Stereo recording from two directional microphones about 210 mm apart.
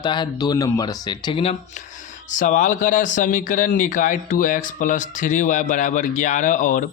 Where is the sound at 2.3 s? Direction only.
40° left (ahead or behind).